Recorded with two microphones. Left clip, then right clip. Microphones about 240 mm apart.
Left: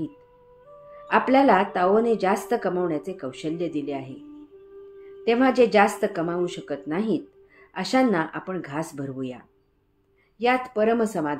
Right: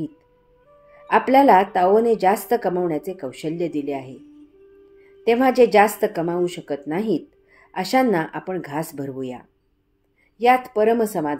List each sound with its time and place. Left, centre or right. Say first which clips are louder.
1.0 s a woman's voice: right 4 dB; right
5.2 s a woman's voice: right 4 dB; right